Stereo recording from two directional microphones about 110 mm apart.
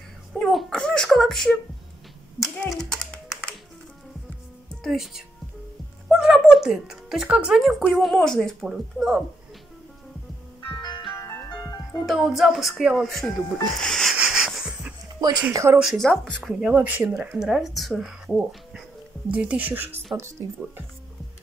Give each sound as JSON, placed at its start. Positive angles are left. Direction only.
{"t": 0.3, "sound": "a sound", "side_deg": 0}
{"t": 2.9, "sound": "a sound", "side_deg": 5}
{"t": 4.8, "sound": "speech", "side_deg": 0}
{"t": 10.7, "sound": "music", "side_deg": 45}
{"t": 12.1, "sound": "speech", "side_deg": 0}
{"t": 13.7, "sound": "music", "side_deg": 5}
{"t": 14.1, "sound": "rub", "side_deg": -5}
{"t": 15.1, "sound": "speech", "side_deg": -35}
{"t": 15.5, "sound": "speech", "side_deg": -25}
{"t": 15.8, "sound": "speech", "side_deg": 0}
{"t": 16.5, "sound": "speech", "side_deg": -10}
{"t": 19.3, "sound": "speech", "side_deg": -10}